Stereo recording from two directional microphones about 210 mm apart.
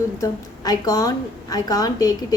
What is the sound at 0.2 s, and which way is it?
A woman's voice, 15° left (ahead or behind).